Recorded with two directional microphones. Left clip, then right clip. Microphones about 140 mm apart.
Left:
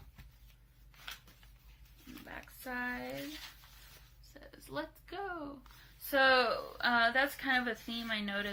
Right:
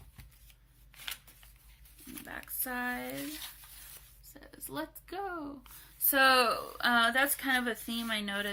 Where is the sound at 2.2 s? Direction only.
35° right (ahead or behind).